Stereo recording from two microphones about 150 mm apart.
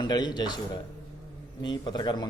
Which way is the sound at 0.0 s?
30° left (ahead or behind).